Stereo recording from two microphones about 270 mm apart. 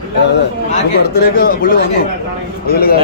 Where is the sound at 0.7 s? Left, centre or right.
Left.